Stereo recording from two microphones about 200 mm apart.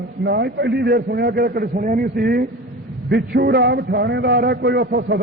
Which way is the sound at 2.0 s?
50° right (ahead or behind).